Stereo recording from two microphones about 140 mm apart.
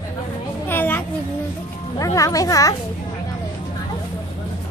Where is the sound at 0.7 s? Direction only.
15° left (ahead or behind).